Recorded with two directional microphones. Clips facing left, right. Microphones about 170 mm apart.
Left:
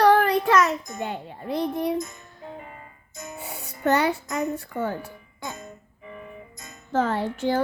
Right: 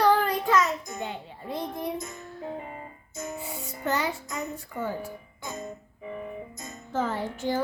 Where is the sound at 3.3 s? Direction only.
65° left (ahead or behind).